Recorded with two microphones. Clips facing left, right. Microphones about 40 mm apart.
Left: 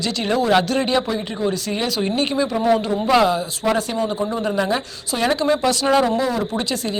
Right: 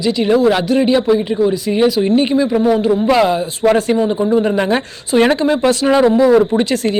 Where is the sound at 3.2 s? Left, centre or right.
Right.